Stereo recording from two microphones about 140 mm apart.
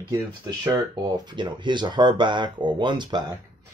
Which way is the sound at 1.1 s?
35° right (ahead or behind).